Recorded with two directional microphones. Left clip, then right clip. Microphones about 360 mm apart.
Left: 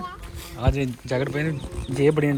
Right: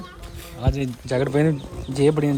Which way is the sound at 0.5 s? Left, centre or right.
Centre.